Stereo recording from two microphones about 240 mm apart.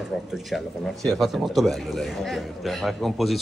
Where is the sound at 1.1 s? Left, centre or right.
Centre.